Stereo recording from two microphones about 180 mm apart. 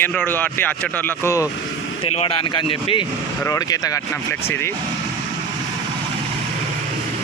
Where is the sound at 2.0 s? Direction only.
35° left (ahead or behind); by 4.7 s 15° left (ahead or behind).